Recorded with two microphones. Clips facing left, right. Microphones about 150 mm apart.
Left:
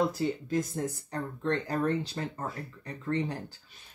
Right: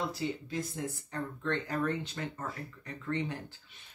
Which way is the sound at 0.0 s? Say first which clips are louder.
Left 6 dB; 45° left (ahead or behind).